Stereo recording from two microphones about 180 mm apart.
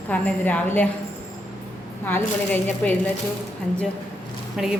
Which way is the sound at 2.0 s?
10° left (ahead or behind).